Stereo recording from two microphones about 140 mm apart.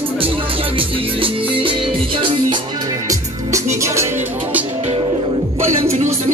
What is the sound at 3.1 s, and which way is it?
Music, 20° right (ahead or behind).